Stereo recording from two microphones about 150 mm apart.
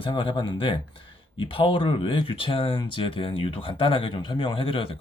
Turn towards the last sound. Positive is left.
turn(degrees=35)  # may be behind; listen again after turning